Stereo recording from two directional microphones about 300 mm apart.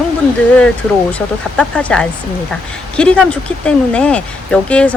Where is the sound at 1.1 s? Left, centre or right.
Centre.